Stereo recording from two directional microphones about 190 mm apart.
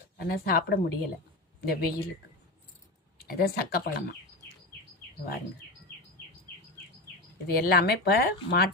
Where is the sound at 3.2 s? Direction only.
50° left (ahead or behind).